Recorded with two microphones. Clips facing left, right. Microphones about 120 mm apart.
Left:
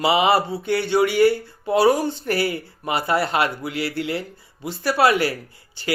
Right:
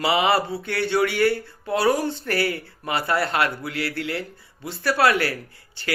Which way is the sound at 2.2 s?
15° left (ahead or behind).